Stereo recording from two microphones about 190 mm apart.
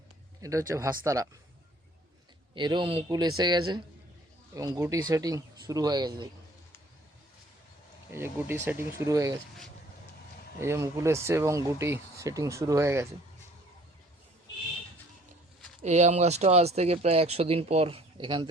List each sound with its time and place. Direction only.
0.4 s speech: 15° right (ahead or behind)
2.6 s speech: 25° right (ahead or behind)
8.1 s speech: 10° right (ahead or behind)
10.6 s speech: 15° right (ahead or behind)
15.8 s speech: 35° right (ahead or behind)